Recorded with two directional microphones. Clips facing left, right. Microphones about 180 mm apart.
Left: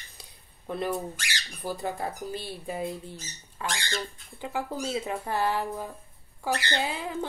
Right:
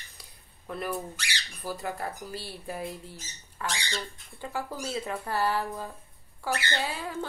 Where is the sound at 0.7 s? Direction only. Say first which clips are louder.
Left 3 dB; 20° left (ahead or behind).